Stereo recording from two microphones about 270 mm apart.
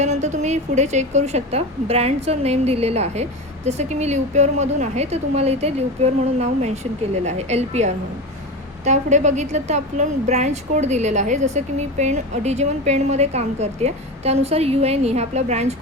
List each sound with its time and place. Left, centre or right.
0.0 s a woman's voice: right